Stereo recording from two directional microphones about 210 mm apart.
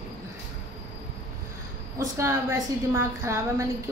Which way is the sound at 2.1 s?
15° right (ahead or behind).